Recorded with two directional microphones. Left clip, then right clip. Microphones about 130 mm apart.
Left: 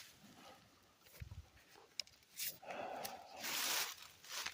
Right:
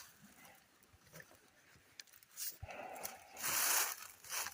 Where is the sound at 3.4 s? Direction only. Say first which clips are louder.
Right 3 dB; 45° right (ahead or behind).